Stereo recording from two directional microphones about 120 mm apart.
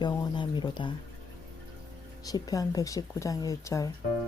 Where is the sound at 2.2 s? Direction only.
30° left (ahead or behind).